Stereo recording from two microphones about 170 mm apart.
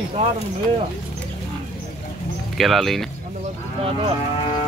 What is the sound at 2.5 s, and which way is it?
Speech, centre (ahead or behind).